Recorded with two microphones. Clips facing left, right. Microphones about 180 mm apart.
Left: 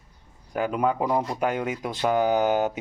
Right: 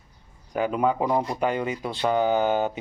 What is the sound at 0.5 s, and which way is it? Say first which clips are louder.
Speech: right 1 dB; centre (ahead or behind).